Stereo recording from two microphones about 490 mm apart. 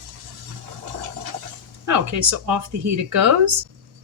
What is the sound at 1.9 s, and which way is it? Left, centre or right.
Speech, right.